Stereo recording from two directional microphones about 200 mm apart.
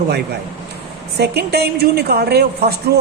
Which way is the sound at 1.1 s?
55° right (ahead or behind).